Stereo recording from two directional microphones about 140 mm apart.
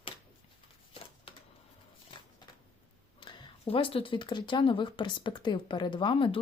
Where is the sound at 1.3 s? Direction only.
40° left (ahead or behind).